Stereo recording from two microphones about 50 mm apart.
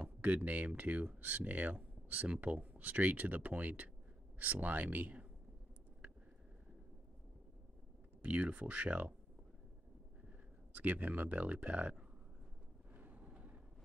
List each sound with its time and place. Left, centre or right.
0.0 s speech: right
8.2 s speech: right
10.7 s speech: right
12.9 s vehicle: right